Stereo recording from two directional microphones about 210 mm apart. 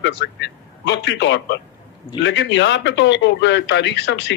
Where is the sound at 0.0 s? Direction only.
55° left (ahead or behind).